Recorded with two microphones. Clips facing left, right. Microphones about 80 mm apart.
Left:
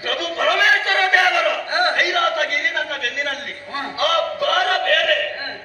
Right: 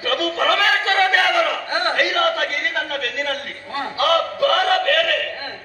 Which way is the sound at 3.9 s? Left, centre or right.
Right.